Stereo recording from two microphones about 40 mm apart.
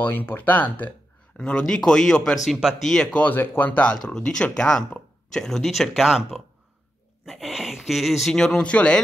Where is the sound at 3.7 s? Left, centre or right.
Left.